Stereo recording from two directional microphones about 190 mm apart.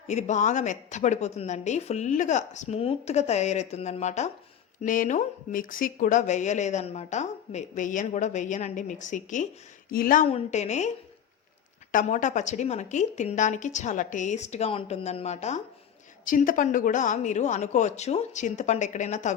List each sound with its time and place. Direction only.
0.1 s a woman's voice: 40° left (ahead or behind)
10.2 s a woman's voice: 35° left (ahead or behind)